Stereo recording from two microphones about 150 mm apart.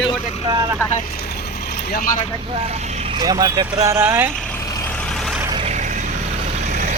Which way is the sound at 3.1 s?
30° right (ahead or behind).